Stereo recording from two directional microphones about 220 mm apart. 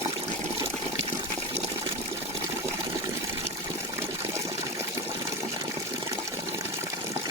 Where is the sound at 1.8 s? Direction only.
10° right (ahead or behind).